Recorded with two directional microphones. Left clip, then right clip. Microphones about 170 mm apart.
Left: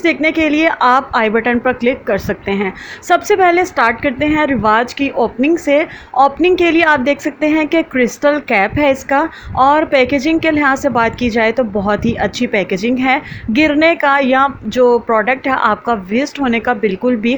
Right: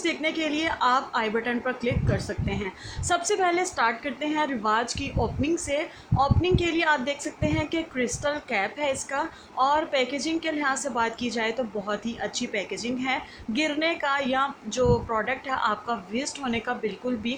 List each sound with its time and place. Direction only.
0.0 s a woman's voice: 40° left (ahead or behind)